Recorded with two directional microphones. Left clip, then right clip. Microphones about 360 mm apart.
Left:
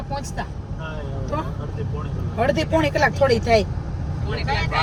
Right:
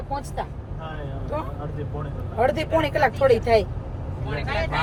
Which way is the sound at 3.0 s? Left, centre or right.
Centre.